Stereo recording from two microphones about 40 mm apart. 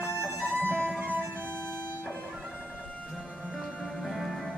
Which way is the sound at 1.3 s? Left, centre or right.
Right.